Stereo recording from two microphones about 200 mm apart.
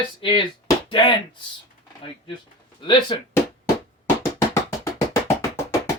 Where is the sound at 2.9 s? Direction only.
25° left (ahead or behind).